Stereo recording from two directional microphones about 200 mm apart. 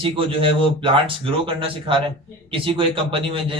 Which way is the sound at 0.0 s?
25° right (ahead or behind).